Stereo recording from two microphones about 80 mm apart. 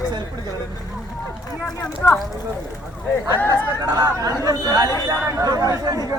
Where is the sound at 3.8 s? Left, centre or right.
Right.